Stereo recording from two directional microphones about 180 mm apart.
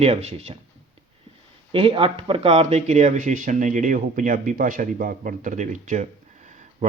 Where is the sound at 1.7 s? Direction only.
30° right (ahead or behind).